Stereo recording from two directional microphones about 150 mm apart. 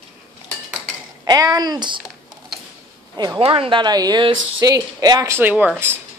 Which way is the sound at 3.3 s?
40° right (ahead or behind).